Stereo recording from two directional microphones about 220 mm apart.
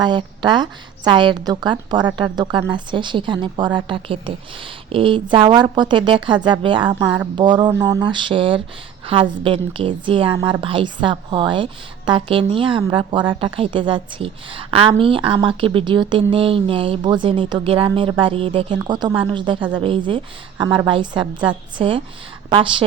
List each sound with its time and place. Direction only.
0.0 s a woman's voice: 20° right (ahead or behind)